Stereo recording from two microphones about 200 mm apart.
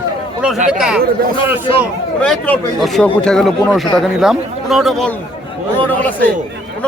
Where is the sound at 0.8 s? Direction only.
5° right (ahead or behind).